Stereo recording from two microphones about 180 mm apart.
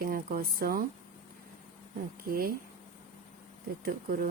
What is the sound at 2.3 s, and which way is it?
Speech, 55° right (ahead or behind).